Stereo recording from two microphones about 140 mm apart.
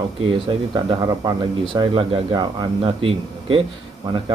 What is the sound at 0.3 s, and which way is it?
Speech, 40° right (ahead or behind).